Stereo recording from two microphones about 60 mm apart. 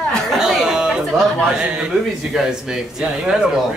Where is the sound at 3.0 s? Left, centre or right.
Centre.